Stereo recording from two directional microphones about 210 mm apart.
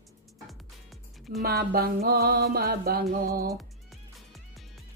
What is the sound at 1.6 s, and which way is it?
Music, 50° right (ahead or behind).